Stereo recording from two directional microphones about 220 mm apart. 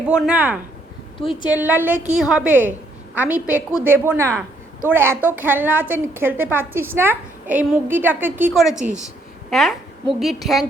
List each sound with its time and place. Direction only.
0.1 s speech: 5° right (ahead or behind)
1.2 s a woman's voice: 25° left (ahead or behind)
1.5 s a woman's voice: 5° right (ahead or behind)